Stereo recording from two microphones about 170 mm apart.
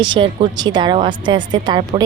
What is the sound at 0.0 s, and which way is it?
Speech, 30° right (ahead or behind).